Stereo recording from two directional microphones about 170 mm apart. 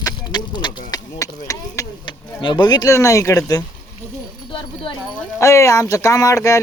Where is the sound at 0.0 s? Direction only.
25° left (ahead or behind).